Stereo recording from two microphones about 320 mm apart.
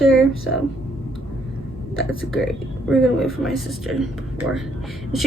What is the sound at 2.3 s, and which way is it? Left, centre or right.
Speech, centre.